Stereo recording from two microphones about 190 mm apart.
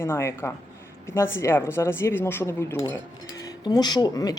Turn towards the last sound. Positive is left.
turn(degrees=20)  # may be behind; listen again after turning